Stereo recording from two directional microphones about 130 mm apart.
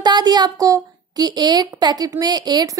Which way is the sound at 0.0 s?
30° right (ahead or behind).